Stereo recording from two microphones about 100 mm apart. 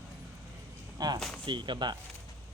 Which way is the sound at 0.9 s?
45° right (ahead or behind).